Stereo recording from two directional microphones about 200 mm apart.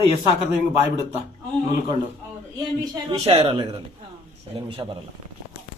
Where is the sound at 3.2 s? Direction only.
30° right (ahead or behind).